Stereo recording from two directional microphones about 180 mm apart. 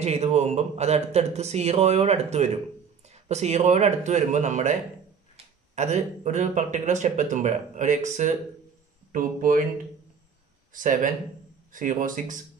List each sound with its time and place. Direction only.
0.0 s speech: 35° right (ahead or behind)
5.8 s speech: 40° right (ahead or behind)
10.7 s speech: 45° right (ahead or behind)